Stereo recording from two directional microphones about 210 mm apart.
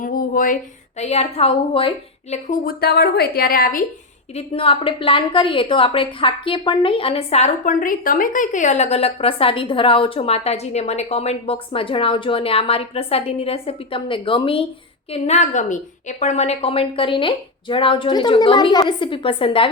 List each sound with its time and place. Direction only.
0.0 s a woman's voice: 40° left (ahead or behind)
2.3 s a woman's voice: 40° left (ahead or behind)
4.4 s a woman's voice: 25° left (ahead or behind)